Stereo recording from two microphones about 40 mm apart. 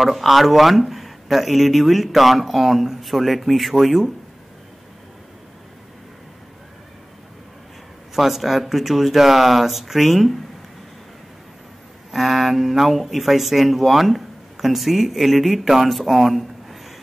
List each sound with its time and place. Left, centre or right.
0.0 s speech: centre
8.2 s speech: centre
12.1 s speech: centre